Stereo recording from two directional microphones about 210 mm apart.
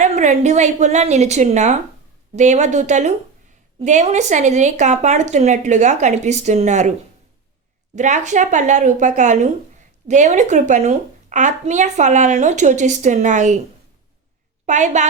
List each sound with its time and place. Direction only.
0.0 s a woman's voice: 35° right (ahead or behind)
7.9 s a woman's voice: 35° right (ahead or behind)
14.7 s a woman's voice: 35° right (ahead or behind)